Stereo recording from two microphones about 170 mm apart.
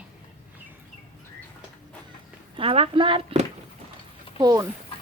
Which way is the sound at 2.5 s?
35° right (ahead or behind).